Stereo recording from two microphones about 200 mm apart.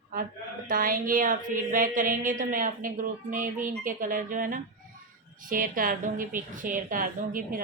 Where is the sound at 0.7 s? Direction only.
45° right (ahead or behind).